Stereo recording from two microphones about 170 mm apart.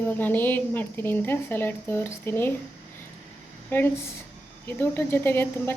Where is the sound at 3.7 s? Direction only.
10° left (ahead or behind).